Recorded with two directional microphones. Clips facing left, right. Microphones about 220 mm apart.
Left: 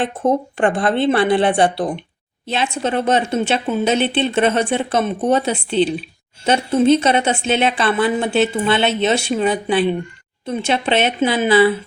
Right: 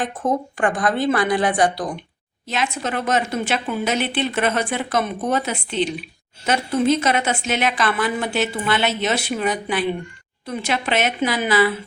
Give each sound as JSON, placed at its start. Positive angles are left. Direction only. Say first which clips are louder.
{"t": 0.0, "sound": "a woman's voice", "louder": "left 4 dB", "side_deg": 25}